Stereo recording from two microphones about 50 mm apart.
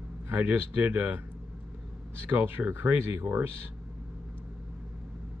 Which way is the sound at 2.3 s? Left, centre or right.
Right.